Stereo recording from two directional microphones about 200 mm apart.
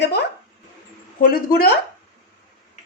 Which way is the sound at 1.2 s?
50° left (ahead or behind).